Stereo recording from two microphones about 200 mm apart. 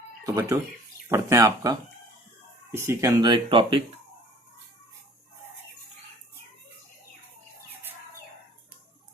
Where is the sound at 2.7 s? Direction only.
15° right (ahead or behind).